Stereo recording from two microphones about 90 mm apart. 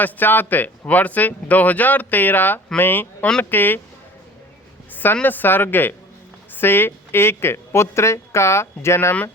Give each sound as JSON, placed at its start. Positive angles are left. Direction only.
{"t": 0.0, "sound": "speech", "side_deg": 20}
{"t": 5.2, "sound": "speech", "side_deg": 20}